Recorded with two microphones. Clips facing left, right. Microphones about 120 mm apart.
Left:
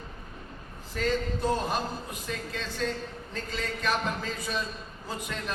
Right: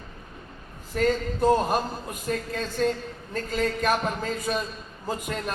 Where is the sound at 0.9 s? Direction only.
50° right (ahead or behind).